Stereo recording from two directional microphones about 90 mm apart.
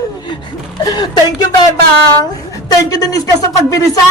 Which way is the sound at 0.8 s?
50° left (ahead or behind).